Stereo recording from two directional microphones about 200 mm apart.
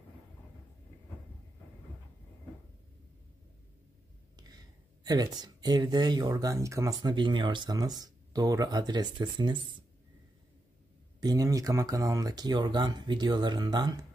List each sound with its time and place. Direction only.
5.0 s speech: 20° right (ahead or behind)
11.1 s speech: 20° right (ahead or behind)